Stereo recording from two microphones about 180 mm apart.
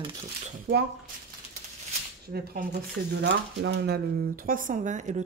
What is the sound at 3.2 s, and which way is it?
Speech, 70° right (ahead or behind).